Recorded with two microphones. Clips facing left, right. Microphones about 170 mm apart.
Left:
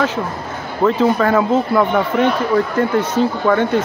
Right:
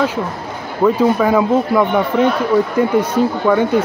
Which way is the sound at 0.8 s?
10° right (ahead or behind).